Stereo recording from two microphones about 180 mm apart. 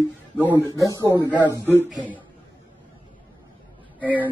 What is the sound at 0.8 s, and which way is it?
Speech, 20° right (ahead or behind).